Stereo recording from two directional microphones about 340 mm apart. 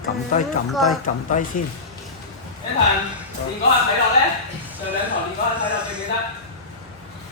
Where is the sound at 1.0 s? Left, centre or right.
Left.